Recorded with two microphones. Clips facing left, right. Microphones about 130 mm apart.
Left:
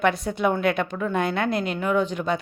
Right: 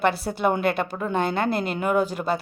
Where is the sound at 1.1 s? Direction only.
30° right (ahead or behind).